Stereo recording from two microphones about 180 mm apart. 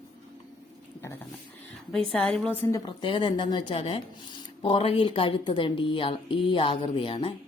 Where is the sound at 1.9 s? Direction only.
5° left (ahead or behind); by 7.4 s 30° left (ahead or behind).